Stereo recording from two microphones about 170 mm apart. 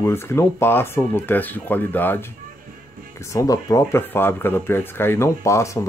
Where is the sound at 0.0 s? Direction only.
15° left (ahead or behind).